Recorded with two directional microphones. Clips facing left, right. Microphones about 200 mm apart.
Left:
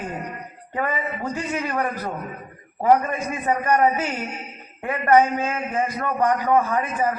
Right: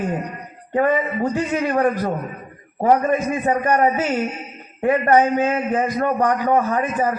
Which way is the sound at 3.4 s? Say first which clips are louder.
Even; 35° right (ahead or behind).